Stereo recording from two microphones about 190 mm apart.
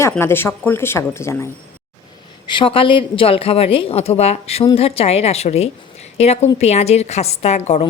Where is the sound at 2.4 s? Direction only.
25° left (ahead or behind).